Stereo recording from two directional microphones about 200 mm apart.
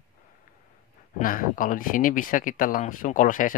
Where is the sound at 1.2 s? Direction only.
45° left (ahead or behind).